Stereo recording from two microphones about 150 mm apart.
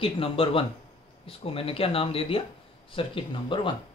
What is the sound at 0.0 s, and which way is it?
A man's voice, 40° left (ahead or behind).